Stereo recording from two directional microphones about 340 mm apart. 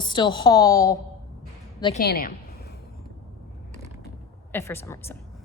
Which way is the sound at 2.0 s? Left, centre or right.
Left.